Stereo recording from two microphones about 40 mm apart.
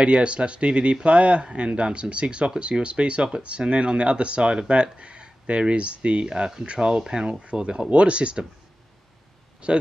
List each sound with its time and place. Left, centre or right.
0.0 s speech: right
9.6 s speech: right